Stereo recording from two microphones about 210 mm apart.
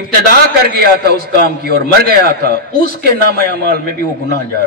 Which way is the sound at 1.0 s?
45° right (ahead or behind).